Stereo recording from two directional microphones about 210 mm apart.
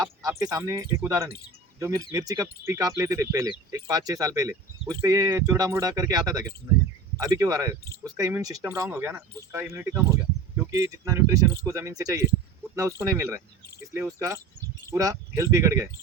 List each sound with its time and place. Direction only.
0.0 s speech: 15° right (ahead or behind)